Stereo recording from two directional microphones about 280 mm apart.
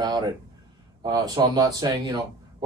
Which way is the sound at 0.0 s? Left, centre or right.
Centre.